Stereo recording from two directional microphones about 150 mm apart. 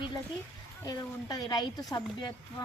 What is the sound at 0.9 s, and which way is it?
A woman's voice, 25° left (ahead or behind).